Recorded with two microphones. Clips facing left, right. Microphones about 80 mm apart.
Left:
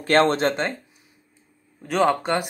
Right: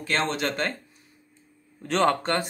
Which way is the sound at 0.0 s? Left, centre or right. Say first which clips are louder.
Left 8 dB; left.